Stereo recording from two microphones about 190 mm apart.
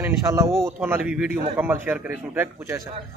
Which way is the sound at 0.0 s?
15° right (ahead or behind).